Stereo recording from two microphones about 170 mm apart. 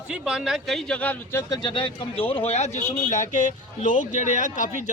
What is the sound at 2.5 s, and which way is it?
Speech, 40° left (ahead or behind).